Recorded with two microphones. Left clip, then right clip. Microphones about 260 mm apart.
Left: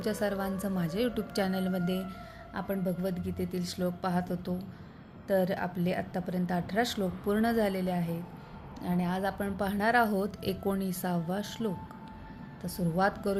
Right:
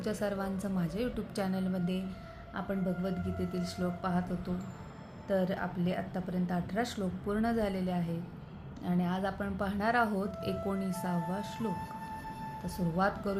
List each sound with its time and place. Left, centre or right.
0.0 s a woman's voice: left